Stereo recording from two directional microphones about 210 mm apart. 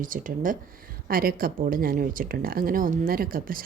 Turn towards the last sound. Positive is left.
turn(degrees=-45)  # may be behind; listen again after turning